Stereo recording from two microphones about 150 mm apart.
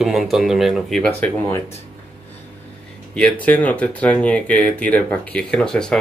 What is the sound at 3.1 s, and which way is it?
Speech, 10° left (ahead or behind).